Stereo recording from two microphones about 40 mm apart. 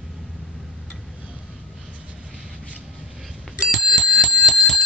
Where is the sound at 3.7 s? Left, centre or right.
Centre.